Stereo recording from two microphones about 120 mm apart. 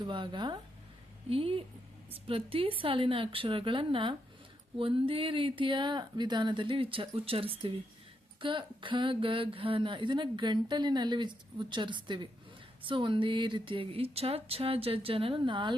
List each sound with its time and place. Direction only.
0.0 s speech: 40° right (ahead or behind)
1.3 s speech: 50° right (ahead or behind)